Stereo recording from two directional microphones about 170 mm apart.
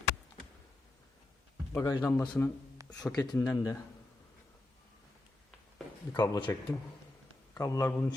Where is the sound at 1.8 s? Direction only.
20° left (ahead or behind).